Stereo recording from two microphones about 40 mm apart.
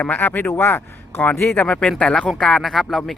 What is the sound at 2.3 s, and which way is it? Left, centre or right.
Speech, centre.